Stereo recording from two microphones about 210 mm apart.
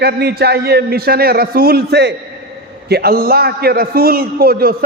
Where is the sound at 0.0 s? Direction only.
50° right (ahead or behind).